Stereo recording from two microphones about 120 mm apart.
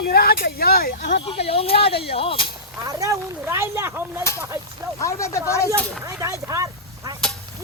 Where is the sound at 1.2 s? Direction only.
50° left (ahead or behind).